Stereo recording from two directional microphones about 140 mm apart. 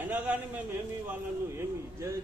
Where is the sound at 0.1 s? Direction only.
10° right (ahead or behind).